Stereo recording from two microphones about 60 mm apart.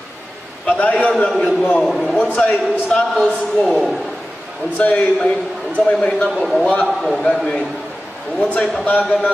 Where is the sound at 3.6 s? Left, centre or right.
Centre.